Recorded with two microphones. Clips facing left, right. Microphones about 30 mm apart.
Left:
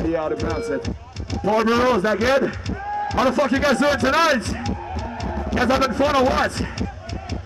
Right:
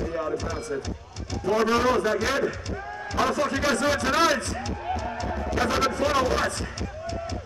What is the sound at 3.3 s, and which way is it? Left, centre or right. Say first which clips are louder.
Speech: left 6 dB; left.